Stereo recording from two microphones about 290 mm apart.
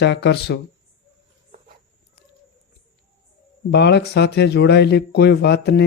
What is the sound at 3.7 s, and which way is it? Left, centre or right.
A man's voice, left.